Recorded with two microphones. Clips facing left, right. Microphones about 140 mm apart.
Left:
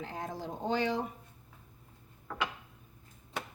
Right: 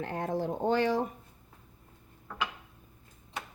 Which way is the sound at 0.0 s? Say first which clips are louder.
Right 7 dB; 60° right (ahead or behind).